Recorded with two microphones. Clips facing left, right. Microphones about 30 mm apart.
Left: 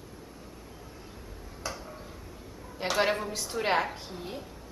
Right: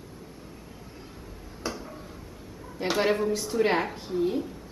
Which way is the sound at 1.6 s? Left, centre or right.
Centre.